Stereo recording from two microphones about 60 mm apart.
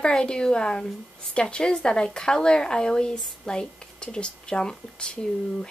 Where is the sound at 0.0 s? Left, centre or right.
Centre.